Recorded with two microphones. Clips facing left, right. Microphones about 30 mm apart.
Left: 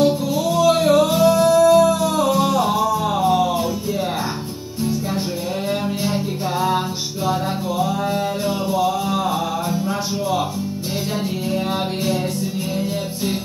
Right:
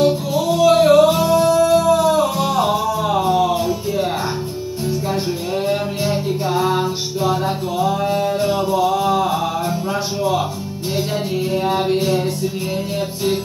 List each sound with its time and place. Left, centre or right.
0.5 s singing: right
1.1 s music: right